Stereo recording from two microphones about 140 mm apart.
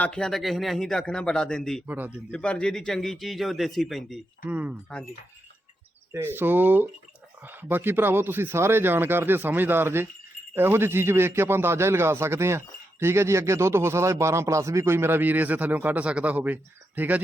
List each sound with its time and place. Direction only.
0.0 s a man's voice: 5° left (ahead or behind)
1.9 s speech: 10° right (ahead or behind)
2.3 s a man's voice: 10° left (ahead or behind)
6.1 s speech: 15° right (ahead or behind)